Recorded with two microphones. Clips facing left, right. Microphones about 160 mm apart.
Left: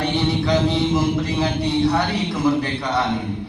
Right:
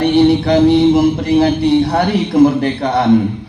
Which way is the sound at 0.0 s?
65° right (ahead or behind).